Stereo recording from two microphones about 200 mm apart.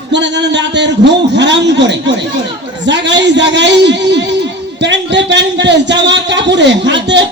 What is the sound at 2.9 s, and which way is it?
A man's voice, 60° right (ahead or behind).